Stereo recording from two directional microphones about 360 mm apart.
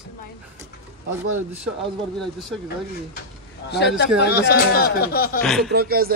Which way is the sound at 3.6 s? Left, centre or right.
Left.